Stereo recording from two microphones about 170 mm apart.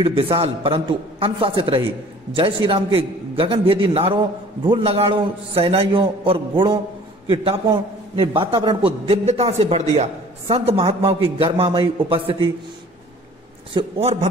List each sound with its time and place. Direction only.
0.0 s a man's voice: 30° right (ahead or behind)
13.7 s a man's voice: 35° right (ahead or behind)